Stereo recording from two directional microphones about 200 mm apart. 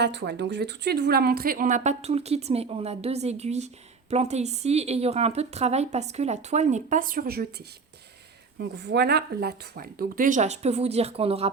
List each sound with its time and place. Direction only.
0.0 s a woman's voice: 60° right (ahead or behind)
8.5 s a woman's voice: 60° right (ahead or behind); by 11.5 s 30° right (ahead or behind)